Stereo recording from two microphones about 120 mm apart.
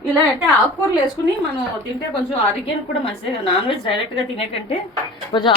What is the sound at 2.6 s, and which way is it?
A woman's voice, 50° left (ahead or behind).